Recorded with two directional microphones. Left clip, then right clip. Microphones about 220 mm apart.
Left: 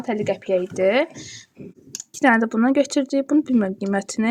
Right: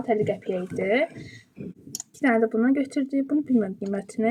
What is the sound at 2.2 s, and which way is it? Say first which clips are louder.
Speech: left 4 dB; 45° left (ahead or behind).